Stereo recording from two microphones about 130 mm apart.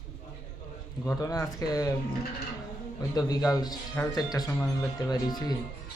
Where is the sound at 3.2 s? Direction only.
30° left (ahead or behind).